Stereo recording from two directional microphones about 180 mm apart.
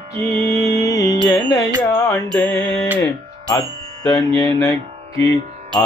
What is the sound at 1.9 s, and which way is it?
Mantra, 15° left (ahead or behind).